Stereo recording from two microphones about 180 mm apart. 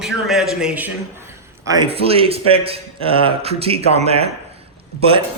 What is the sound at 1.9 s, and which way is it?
A man's voice, 30° right (ahead or behind).